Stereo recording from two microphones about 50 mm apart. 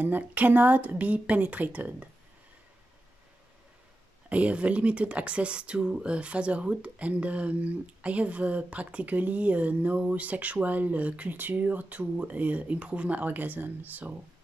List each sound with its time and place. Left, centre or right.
0.0 s speech: right
4.3 s speech: right